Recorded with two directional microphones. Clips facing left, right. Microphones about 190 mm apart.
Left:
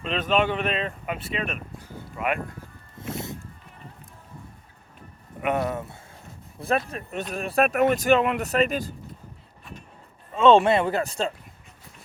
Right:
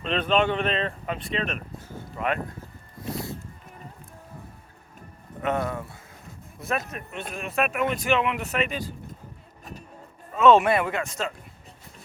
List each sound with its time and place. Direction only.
0.0 s speech: 5° left (ahead or behind)
3.1 s a sound: 25° left (ahead or behind)
5.4 s speech: 20° left (ahead or behind); by 8.9 s 40° left (ahead or behind)
10.3 s speech: 30° left (ahead or behind)